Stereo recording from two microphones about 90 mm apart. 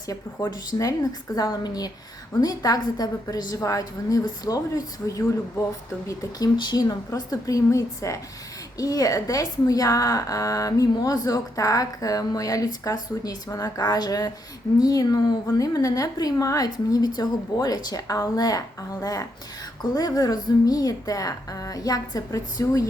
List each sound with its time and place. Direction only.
0.1 s a woman's voice: 45° left (ahead or behind)
6.6 s a woman's voice: 50° left (ahead or behind)